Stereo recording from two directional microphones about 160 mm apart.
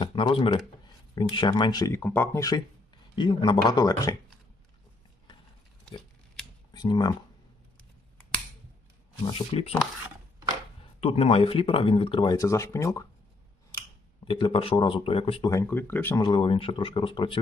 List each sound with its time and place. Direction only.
0.0 s speech: 30° left (ahead or behind)
1.9 s speech: 10° left (ahead or behind)
6.7 s speech: 25° left (ahead or behind)
9.5 s speech: 40° left (ahead or behind)
11.0 s speech: 40° left (ahead or behind); by 13.1 s 20° left (ahead or behind)
14.3 s speech: 30° left (ahead or behind)
15.4 s speech: 15° left (ahead or behind)
16.2 s speech: 30° left (ahead or behind)